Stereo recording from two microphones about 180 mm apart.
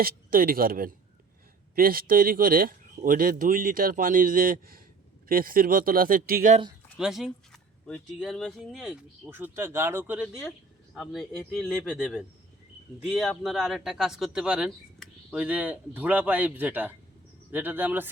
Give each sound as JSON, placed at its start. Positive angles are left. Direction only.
{"t": 0.0, "sound": "speech", "side_deg": -55}
{"t": 7.0, "sound": "a man's voice", "side_deg": 0}